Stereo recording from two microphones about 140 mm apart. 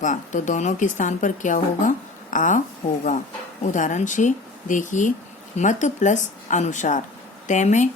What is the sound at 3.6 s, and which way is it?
Speech, 65° left (ahead or behind).